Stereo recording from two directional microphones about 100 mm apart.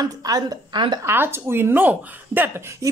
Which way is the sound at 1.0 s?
20° right (ahead or behind).